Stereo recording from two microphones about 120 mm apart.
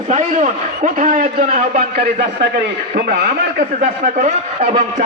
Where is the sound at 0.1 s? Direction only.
90° right.